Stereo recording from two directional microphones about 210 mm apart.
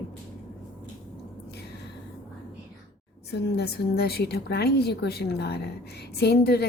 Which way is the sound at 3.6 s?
50° left (ahead or behind).